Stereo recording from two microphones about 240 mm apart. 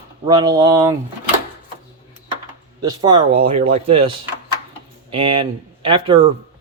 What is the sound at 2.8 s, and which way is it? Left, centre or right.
A man's voice, centre.